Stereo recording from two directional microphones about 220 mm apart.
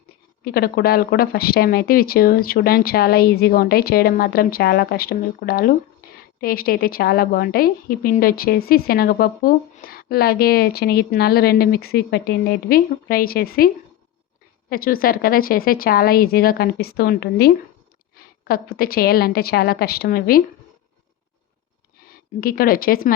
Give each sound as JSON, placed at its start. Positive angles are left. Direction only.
{"t": 0.4, "sound": "a woman's voice", "side_deg": 45}
{"t": 14.7, "sound": "a woman's voice", "side_deg": 40}
{"t": 22.4, "sound": "a woman's voice", "side_deg": 45}